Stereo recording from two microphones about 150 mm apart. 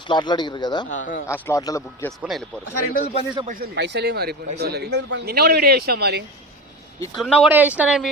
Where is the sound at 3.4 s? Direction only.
80° right.